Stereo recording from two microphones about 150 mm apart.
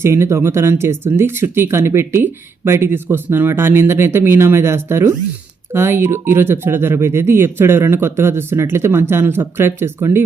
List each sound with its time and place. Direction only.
0.0 s speech: 15° right (ahead or behind)